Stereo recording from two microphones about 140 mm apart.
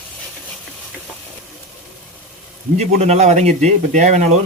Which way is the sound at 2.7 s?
50° right (ahead or behind).